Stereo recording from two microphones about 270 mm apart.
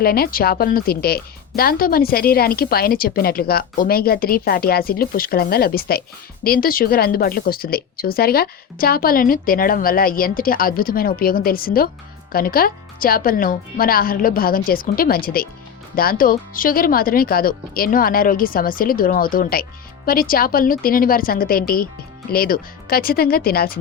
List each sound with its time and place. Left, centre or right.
0.0 s speech: left